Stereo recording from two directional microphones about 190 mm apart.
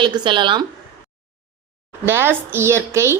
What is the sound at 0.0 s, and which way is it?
Speech, 25° right (ahead or behind).